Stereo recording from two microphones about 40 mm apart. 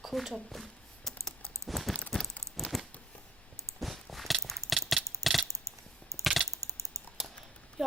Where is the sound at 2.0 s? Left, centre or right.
Left.